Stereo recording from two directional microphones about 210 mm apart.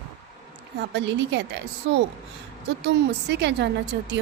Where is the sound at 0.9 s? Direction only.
60° right (ahead or behind).